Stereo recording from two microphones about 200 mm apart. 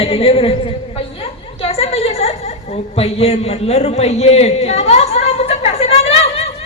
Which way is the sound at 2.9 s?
30° left (ahead or behind).